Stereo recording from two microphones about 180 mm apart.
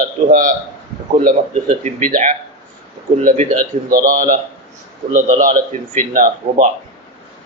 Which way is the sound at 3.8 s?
50° right (ahead or behind).